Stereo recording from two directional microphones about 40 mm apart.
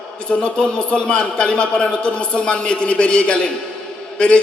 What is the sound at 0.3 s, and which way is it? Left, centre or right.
A man's voice, left.